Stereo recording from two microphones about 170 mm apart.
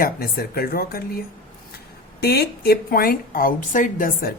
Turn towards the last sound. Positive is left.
turn(degrees=60)  # may be behind; listen again after turning